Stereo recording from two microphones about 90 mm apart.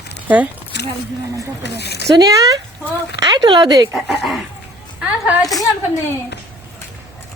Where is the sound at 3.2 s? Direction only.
55° right (ahead or behind).